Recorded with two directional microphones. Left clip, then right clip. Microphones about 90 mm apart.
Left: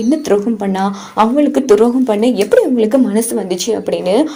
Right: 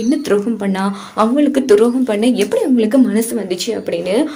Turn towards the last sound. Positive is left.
turn(degrees=30)  # may be behind; listen again after turning